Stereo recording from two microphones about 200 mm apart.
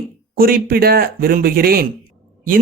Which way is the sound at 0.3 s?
45° right (ahead or behind).